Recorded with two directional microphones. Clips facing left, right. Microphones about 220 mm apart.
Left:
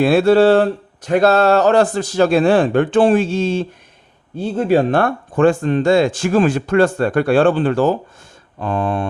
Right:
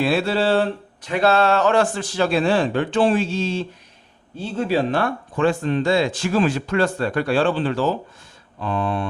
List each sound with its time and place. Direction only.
0.0 s speech: 50° left (ahead or behind)